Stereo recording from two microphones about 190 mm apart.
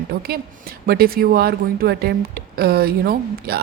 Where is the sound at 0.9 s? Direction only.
50° right (ahead or behind).